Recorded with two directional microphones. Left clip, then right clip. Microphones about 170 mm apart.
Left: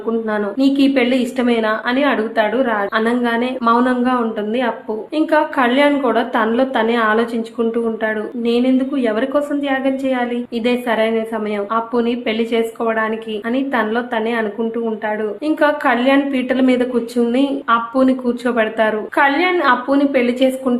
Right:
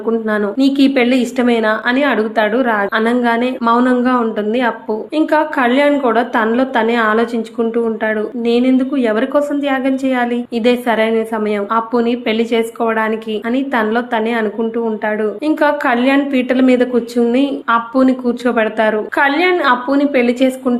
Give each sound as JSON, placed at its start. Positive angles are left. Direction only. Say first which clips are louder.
{"t": 0.3, "sound": "a woman's voice", "louder": "right 1 dB", "side_deg": -20}